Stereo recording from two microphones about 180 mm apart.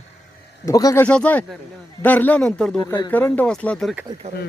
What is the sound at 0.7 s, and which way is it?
Speech, 20° left (ahead or behind).